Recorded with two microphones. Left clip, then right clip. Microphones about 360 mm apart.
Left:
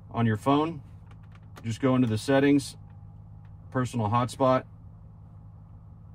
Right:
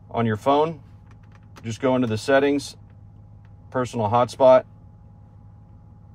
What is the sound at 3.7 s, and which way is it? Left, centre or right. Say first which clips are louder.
Speech: right 6 dB; centre.